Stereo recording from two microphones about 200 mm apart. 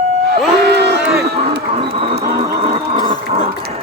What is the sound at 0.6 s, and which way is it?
Run, 55° right (ahead or behind).